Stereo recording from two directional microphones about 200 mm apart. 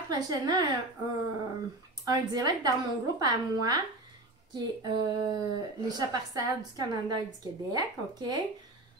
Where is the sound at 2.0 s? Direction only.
20° right (ahead or behind).